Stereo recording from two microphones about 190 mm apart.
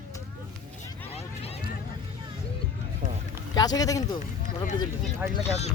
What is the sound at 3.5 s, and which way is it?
Speech, 20° left (ahead or behind).